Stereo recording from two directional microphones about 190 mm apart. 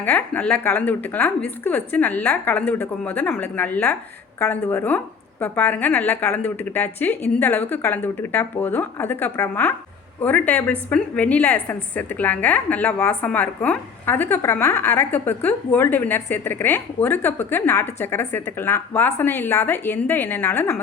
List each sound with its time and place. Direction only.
0.0 s a woman's voice: 10° left (ahead or behind)